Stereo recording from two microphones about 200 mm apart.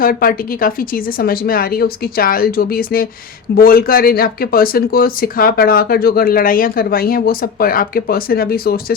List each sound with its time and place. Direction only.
0.0 s speech: 45° left (ahead or behind)